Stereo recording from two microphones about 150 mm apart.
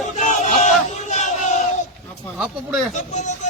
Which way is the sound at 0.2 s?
55° left (ahead or behind).